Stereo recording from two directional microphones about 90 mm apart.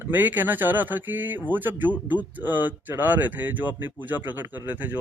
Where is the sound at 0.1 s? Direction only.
20° right (ahead or behind).